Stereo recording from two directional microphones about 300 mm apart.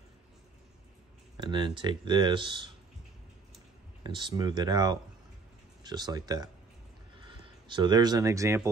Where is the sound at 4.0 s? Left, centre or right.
Centre.